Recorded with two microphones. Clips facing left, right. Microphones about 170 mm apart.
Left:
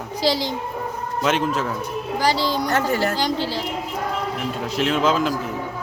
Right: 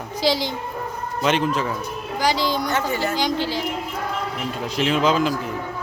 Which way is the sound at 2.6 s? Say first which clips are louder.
Left 2 dB; 40° left (ahead or behind).